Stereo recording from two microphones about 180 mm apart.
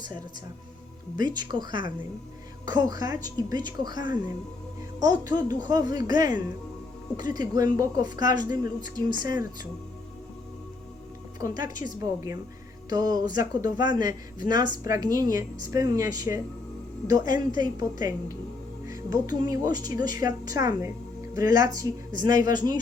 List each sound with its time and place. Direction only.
1.3 s speech: 25° right (ahead or behind)
11.3 s speech: 20° right (ahead or behind)